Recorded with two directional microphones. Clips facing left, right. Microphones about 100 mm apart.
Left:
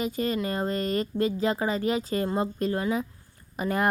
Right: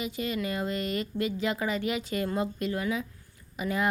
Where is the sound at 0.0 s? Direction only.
40° left (ahead or behind).